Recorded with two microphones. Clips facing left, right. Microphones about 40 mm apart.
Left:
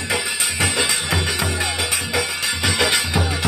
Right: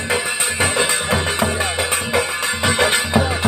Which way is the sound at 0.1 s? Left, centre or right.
Right.